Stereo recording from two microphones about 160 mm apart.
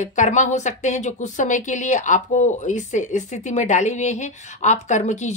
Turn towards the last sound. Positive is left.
turn(degrees=45)  # may be behind; listen again after turning